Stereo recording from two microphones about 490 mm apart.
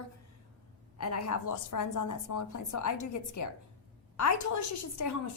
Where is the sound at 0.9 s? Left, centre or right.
Left.